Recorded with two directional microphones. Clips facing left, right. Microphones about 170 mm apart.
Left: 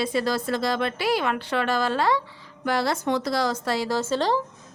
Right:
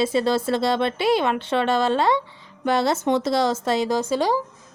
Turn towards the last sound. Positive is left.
turn(degrees=-10)  # may be behind; listen again after turning